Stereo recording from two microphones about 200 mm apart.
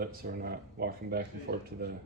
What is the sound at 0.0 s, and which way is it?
Speech, 50° right (ahead or behind).